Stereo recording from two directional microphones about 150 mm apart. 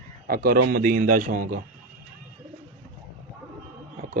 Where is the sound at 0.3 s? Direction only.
80° right; by 1.6 s 65° right (ahead or behind).